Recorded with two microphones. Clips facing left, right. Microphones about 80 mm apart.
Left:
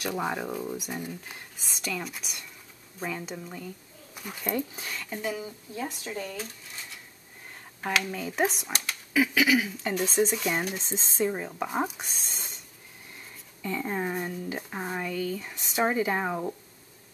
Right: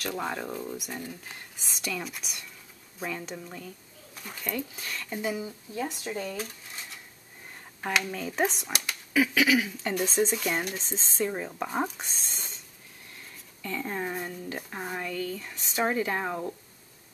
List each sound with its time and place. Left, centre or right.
0.0 s speech: centre
4.5 s speech: left
4.8 s speech: centre
5.1 s a woman's voice: centre
7.8 s speech: centre
13.6 s speech: centre